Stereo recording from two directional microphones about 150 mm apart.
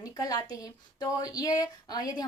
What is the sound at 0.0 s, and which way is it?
A woman's voice, 25° left (ahead or behind).